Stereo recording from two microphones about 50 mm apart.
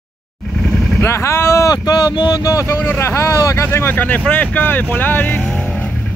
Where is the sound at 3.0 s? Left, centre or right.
Left.